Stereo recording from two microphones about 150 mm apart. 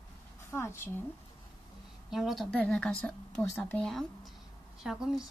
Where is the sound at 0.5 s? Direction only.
15° left (ahead or behind).